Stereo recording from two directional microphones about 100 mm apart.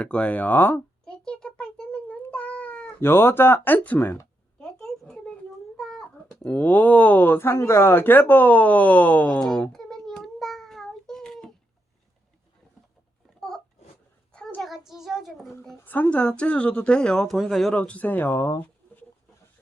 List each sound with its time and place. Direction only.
0.0 s a woman's voice: 10° left (ahead or behind)
1.0 s cat: 10° left (ahead or behind)
4.6 s a sound: 5° left (ahead or behind)
5.7 s cat: centre (ahead or behind)
6.4 s speech: 15° left (ahead or behind)
14.3 s a sound: 5° left (ahead or behind)
15.8 s a woman's voice: 15° left (ahead or behind)
17.7 s a woman's voice: 15° left (ahead or behind)